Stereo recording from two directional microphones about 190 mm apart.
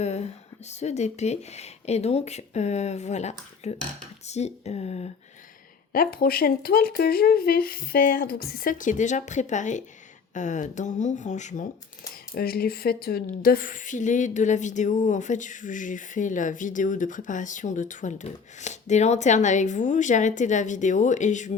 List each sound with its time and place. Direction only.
0.0 s a sound: 35° left (ahead or behind)
0.7 s a woman's voice: 35° left (ahead or behind)
5.9 s a woman's voice: 50° left (ahead or behind)
12.3 s a woman's voice: 55° left (ahead or behind)